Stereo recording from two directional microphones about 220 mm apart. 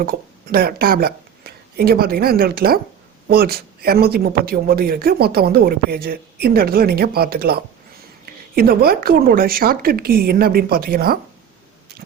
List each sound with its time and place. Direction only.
0.0 s speech: 45° right (ahead or behind)